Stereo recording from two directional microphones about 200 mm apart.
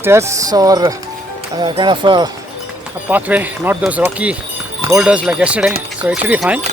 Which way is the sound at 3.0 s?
10° right (ahead or behind).